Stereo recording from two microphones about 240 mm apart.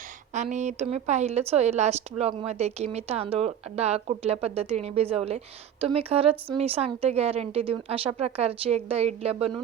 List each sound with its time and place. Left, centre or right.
0.5 s speech: right